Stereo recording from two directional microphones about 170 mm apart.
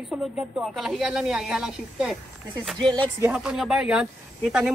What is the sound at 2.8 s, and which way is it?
Speech, 30° right (ahead or behind).